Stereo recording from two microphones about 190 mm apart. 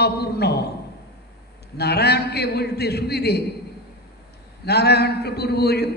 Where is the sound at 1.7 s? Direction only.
60° left (ahead or behind).